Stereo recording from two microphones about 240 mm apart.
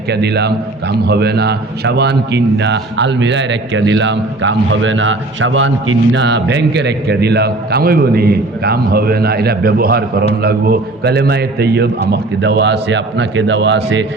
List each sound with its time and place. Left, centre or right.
0.1 s a man's voice: right